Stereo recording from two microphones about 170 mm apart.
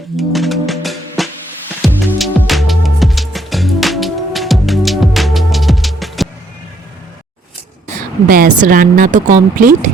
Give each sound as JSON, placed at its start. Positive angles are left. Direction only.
{"t": 0.2, "sound": "music", "side_deg": 0}
{"t": 8.3, "sound": "speech", "side_deg": -55}